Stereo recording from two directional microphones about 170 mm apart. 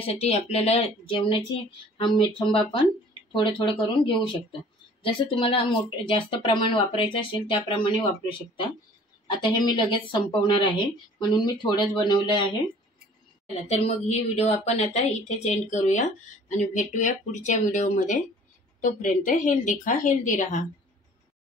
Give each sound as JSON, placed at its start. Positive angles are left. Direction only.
{"t": 0.0, "sound": "speech", "side_deg": 35}
{"t": 13.7, "sound": "a woman's voice", "side_deg": 40}